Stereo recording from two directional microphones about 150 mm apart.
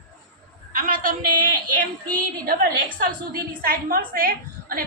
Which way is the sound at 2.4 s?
75° right (ahead or behind).